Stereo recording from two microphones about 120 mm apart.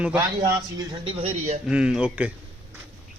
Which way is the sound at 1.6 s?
5° right (ahead or behind).